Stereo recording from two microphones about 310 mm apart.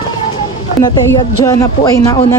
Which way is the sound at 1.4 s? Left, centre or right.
Centre.